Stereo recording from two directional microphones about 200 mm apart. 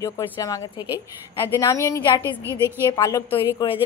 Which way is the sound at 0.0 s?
20° left (ahead or behind).